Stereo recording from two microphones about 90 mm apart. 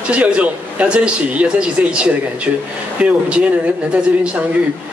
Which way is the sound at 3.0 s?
10° right (ahead or behind).